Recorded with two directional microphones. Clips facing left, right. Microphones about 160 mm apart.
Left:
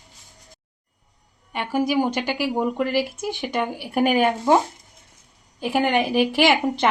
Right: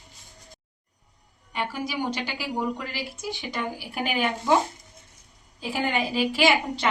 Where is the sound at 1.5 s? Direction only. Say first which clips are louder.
Left 8 dB; 50° left (ahead or behind).